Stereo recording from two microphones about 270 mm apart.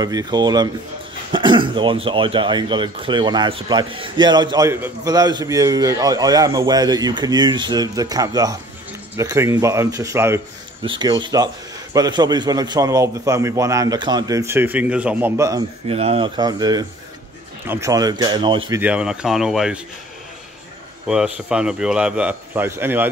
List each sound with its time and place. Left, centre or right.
0.0 s speech: centre
18.7 s a man's voice: centre
21.1 s a man's voice: centre